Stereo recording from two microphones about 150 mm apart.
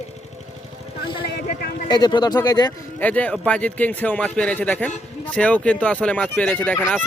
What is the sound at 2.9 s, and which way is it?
A man's voice, 10° left (ahead or behind).